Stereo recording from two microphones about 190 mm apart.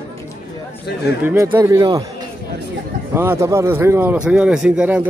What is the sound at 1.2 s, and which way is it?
Speech, 10° right (ahead or behind).